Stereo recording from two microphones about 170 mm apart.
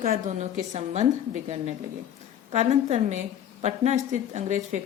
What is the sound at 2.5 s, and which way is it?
Speech, 40° right (ahead or behind).